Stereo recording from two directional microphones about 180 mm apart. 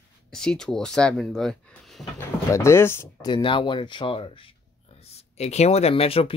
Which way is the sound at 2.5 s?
15° left (ahead or behind).